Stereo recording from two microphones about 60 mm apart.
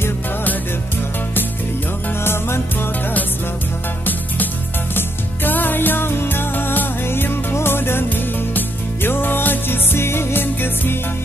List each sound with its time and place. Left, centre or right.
2.2 s music: left
4.9 s music: left